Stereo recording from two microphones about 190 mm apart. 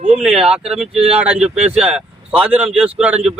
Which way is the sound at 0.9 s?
30° right (ahead or behind).